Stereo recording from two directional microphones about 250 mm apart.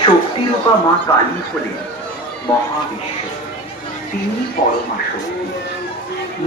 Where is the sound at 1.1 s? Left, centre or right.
Centre.